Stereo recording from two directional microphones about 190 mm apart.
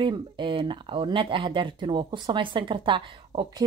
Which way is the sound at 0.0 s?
25° right (ahead or behind).